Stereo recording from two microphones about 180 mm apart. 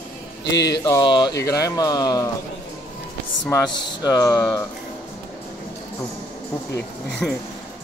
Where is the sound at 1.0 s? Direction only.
25° left (ahead or behind).